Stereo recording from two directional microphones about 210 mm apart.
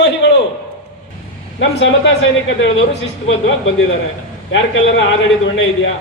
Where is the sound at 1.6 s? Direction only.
60° left (ahead or behind).